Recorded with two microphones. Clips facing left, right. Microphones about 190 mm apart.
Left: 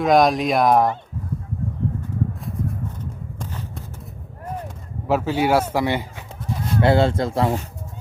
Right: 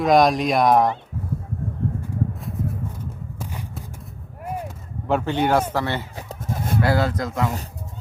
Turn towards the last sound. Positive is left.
turn(degrees=35)  # may be behind; listen again after turning